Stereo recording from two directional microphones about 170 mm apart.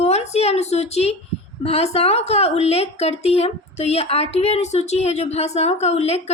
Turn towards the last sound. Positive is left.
turn(degrees=40)  # may be behind; listen again after turning